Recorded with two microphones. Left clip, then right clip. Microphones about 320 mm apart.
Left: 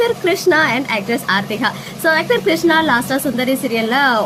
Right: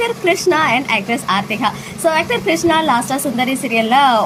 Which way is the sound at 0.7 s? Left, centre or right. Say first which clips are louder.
Right 2 dB; left.